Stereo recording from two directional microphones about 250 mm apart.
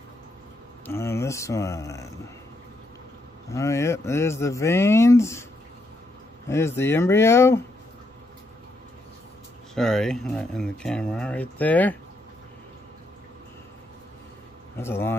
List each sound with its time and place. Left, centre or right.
0.8 s speech: centre
3.5 s speech: centre
6.5 s speech: centre
9.8 s speech: centre
14.8 s speech: centre